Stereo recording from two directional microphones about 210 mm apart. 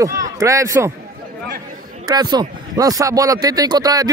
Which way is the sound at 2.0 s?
20° right (ahead or behind).